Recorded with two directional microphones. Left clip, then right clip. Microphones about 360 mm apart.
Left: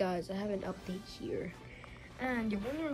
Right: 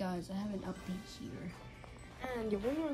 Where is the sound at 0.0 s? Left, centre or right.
Centre.